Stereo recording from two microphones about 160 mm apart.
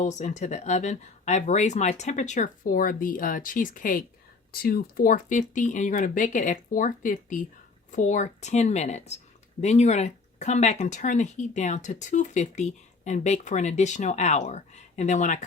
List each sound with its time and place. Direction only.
0.0 s speech: 50° left (ahead or behind)